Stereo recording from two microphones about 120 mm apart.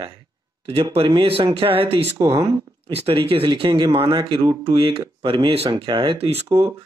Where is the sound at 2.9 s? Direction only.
55° right (ahead or behind).